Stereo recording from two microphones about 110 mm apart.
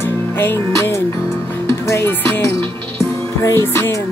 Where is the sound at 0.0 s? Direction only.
20° left (ahead or behind).